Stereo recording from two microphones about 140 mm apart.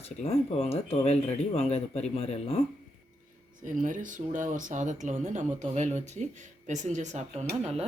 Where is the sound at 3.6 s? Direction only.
65° right (ahead or behind).